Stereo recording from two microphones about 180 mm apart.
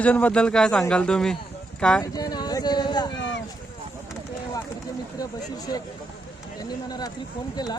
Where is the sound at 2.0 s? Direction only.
20° left (ahead or behind).